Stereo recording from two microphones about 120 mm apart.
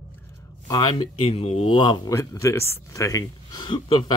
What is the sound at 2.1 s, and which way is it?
Speech, 25° left (ahead or behind).